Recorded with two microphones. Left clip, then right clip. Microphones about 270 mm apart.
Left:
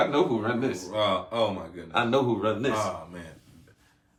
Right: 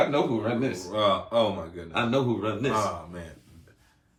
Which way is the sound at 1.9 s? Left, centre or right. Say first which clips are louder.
Left 2 dB; centre.